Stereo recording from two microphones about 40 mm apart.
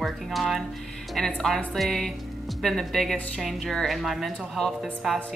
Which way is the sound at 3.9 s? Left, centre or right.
Centre.